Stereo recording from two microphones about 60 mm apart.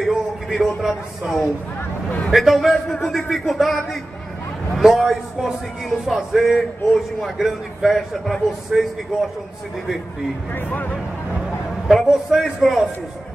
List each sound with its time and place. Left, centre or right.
0.0 s a man's voice: centre
10.5 s speech: left
11.9 s a man's voice: centre